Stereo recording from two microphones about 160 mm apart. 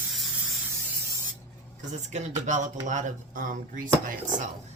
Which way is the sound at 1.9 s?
50° right (ahead or behind).